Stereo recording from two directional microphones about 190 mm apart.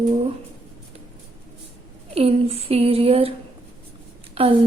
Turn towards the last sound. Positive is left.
turn(degrees=-30)  # may be behind; listen again after turning